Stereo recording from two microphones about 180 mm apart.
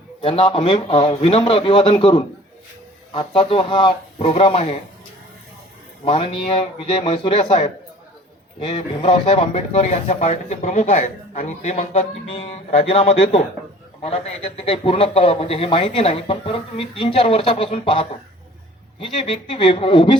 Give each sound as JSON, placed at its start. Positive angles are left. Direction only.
{"t": 0.2, "sound": "speech", "side_deg": 30}
{"t": 6.1, "sound": "speech", "side_deg": 30}